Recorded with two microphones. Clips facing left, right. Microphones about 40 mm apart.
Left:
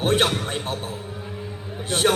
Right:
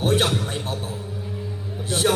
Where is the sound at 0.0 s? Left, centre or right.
Centre.